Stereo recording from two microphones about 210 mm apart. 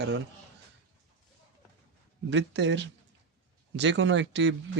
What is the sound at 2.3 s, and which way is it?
Speech, 60° right (ahead or behind).